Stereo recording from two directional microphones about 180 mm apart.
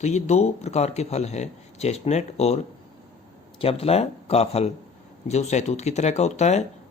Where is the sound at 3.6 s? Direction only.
35° left (ahead or behind).